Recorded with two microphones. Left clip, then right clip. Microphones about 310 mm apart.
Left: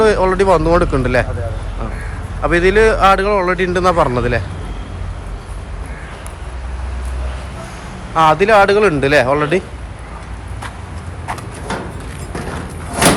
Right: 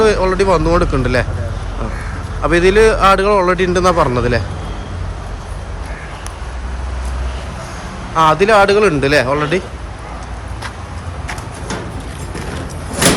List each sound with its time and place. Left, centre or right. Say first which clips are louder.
0.0 s speech: even; centre
2.4 s speech: right 1 dB; centre
8.1 s speech: even; centre